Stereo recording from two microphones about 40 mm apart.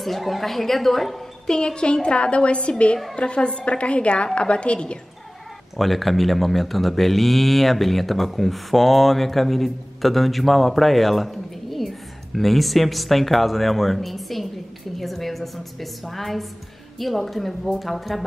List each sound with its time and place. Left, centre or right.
0.0 s speech: centre
1.5 s a woman's voice: centre
5.8 s speech: centre